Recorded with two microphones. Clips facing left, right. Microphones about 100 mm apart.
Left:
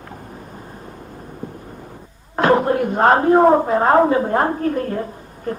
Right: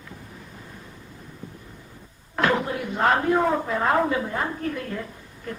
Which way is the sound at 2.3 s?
40° left (ahead or behind).